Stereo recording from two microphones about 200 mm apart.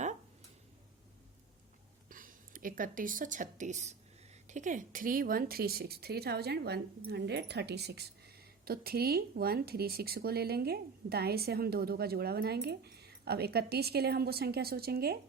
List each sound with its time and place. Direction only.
2.0 s a woman's voice: 45° right (ahead or behind)